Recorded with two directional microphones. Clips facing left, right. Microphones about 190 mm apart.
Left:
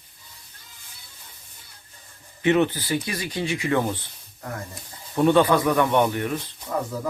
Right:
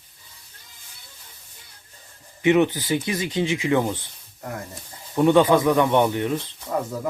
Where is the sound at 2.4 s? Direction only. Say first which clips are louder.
Right 2 dB; 15° right (ahead or behind).